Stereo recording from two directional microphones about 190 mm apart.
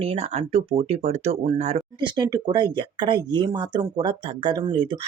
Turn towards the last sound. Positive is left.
turn(degrees=-25)  # may be behind; listen again after turning